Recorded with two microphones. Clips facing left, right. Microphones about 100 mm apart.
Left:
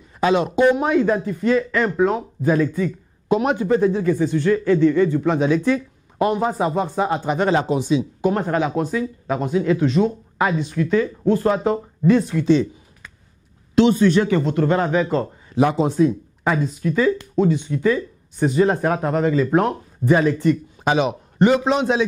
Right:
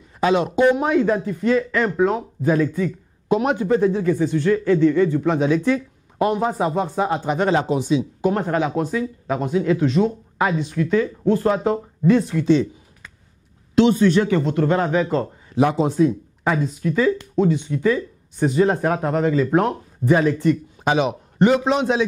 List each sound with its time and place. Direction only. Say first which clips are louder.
0.2 s a man's voice: even; 20° left (ahead or behind)